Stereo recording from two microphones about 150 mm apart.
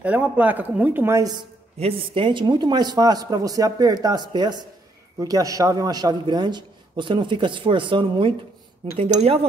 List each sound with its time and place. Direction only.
0.0 s a woman's voice: 10° right (ahead or behind)
1.8 s a man's voice: 35° right (ahead or behind)